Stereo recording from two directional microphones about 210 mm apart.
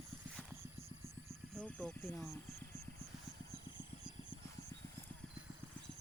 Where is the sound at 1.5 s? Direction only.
5° left (ahead or behind).